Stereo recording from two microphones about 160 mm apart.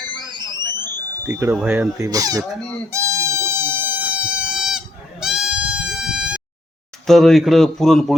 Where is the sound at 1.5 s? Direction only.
5° right (ahead or behind).